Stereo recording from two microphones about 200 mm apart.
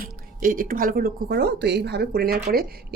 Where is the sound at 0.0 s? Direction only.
45° right (ahead or behind).